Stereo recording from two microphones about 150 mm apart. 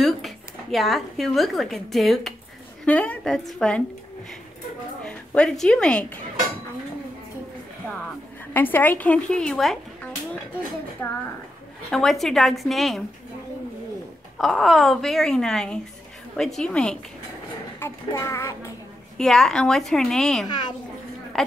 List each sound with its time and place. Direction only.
0.0 s a woman's voice: centre (ahead or behind)
5.0 s a woman's voice: 5° left (ahead or behind)
8.5 s a child's voice: 15° left (ahead or behind)
11.0 s a woman's voice: 15° left (ahead or behind)
11.9 s a woman's voice: centre (ahead or behind)
14.4 s a woman's voice: centre (ahead or behind)
17.7 s a woman's voice: 15° left (ahead or behind)
19.1 s a woman's voice: 5° left (ahead or behind)
20.4 s a woman's voice: 30° left (ahead or behind)
21.4 s speech: centre (ahead or behind)